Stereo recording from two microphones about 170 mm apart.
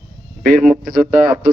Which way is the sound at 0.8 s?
60° right (ahead or behind).